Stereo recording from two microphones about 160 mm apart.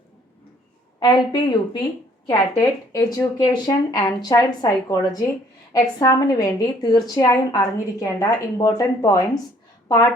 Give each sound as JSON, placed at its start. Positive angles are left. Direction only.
{"t": 0.9, "sound": "speech", "side_deg": 25}